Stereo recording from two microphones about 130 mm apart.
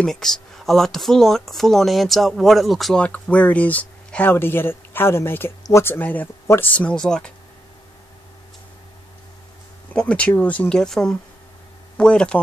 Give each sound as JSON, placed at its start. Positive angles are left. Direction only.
{"t": 0.0, "sound": "speech", "side_deg": 5}
{"t": 9.9, "sound": "speech", "side_deg": 10}